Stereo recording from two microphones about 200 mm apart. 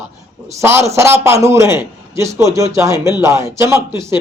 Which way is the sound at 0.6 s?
15° right (ahead or behind).